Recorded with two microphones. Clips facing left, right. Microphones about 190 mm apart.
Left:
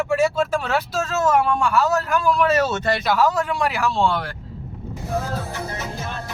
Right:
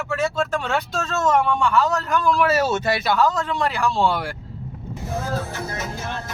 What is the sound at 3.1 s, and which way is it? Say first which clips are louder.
Speech: left 1 dB; 10° left (ahead or behind).